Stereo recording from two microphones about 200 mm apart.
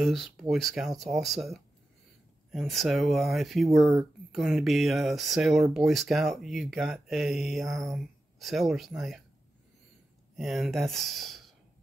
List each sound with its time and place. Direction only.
0.0 s speech: centre (ahead or behind)
10.3 s speech: centre (ahead or behind)